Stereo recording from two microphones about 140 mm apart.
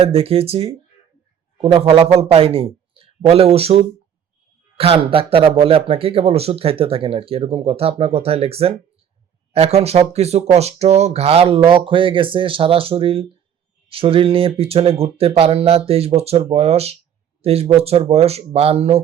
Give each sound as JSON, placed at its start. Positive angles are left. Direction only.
{"t": 0.0, "sound": "a man's voice", "side_deg": -45}